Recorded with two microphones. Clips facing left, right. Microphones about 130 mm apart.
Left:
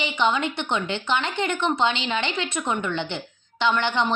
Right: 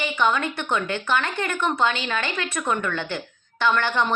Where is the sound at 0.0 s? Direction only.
20° left (ahead or behind).